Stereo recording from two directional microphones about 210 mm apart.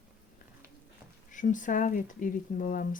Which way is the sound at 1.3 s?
35° left (ahead or behind).